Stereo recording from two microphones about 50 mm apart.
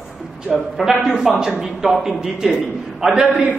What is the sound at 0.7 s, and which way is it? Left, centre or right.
A man's voice, centre.